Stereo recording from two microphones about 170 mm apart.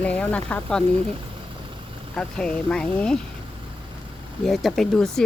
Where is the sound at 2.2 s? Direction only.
5° left (ahead or behind).